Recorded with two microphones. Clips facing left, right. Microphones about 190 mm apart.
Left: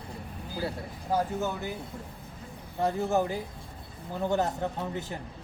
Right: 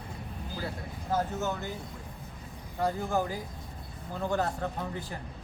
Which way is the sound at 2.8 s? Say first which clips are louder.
Left 3 dB; 25° left (ahead or behind).